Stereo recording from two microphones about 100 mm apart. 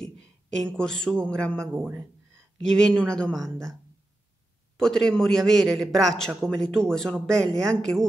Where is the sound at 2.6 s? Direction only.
5° left (ahead or behind).